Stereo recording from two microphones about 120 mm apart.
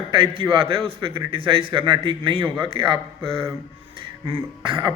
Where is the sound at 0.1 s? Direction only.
45° right (ahead or behind).